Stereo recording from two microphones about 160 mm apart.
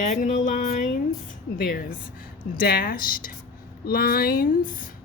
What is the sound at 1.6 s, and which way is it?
Speech, 65° left (ahead or behind).